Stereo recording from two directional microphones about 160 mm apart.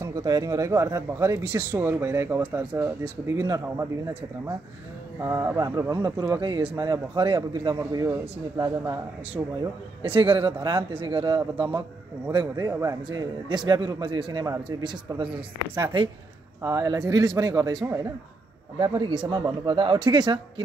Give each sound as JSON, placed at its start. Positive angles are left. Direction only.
{"t": 0.0, "sound": "a man's voice", "side_deg": -25}
{"t": 5.2, "sound": "a man's voice", "side_deg": -20}
{"t": 10.0, "sound": "a man's voice", "side_deg": -35}
{"t": 16.6, "sound": "a man's voice", "side_deg": -25}